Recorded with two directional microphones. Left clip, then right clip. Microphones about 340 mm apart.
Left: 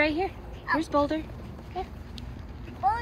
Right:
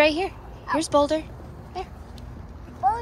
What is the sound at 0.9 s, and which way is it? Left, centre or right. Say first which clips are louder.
Speech: right 7 dB; centre.